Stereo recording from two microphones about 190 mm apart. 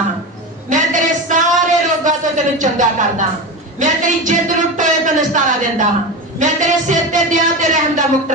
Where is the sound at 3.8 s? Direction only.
40° right (ahead or behind).